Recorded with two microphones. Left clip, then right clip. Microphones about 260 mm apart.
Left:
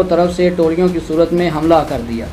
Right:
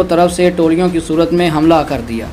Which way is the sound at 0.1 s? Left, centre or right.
Right.